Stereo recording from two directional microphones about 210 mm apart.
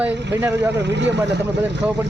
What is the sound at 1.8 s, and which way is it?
Speech, 5° right (ahead or behind).